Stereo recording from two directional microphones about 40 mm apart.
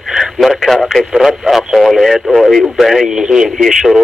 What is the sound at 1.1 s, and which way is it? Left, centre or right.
Speech, centre.